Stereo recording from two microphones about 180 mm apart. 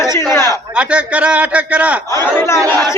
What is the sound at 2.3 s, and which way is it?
Speech, 15° left (ahead or behind).